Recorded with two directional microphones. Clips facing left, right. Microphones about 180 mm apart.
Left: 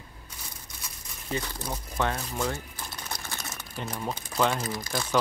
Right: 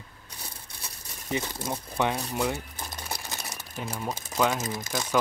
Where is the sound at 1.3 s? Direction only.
20° right (ahead or behind).